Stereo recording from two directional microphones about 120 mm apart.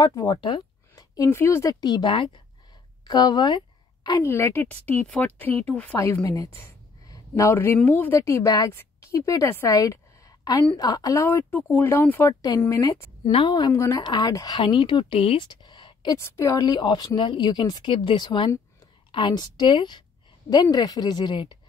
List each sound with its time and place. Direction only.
0.0 s a woman's voice: 30° left (ahead or behind)
3.1 s a sound: 35° left (ahead or behind)
4.2 s speech: 20° left (ahead or behind)
5.9 s a woman's voice: 25° left (ahead or behind)
11.2 s speech: 15° left (ahead or behind)
12.4 s a woman's voice: 30° left (ahead or behind)
13.2 s speech: 50° left (ahead or behind)
13.7 s a woman's voice: 25° left (ahead or behind); by 15.4 s 50° left (ahead or behind)
15.4 s a sound: 35° left (ahead or behind)
16.2 s speech: 20° left (ahead or behind); by 21.5 s 40° left (ahead or behind)